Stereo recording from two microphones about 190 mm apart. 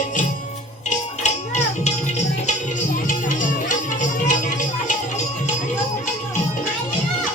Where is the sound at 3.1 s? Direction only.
40° left (ahead or behind).